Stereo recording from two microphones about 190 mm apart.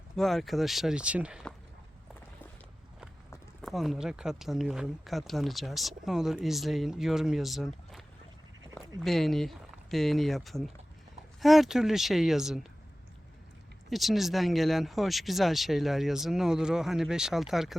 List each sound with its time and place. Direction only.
0.2 s speech: centre (ahead or behind)
3.6 s speech: centre (ahead or behind)
8.7 s speech: centre (ahead or behind)
13.9 s speech: centre (ahead or behind)